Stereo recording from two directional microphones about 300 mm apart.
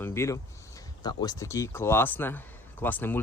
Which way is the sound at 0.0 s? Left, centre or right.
Centre.